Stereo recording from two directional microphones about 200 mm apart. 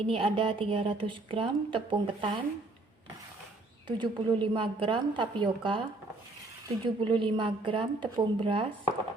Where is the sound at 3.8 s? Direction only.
25° right (ahead or behind).